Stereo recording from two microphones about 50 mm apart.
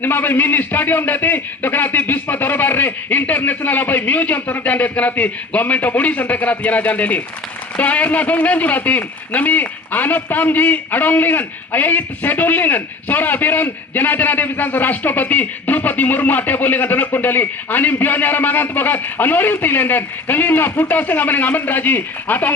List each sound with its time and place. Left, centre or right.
0.0 s a man's voice: left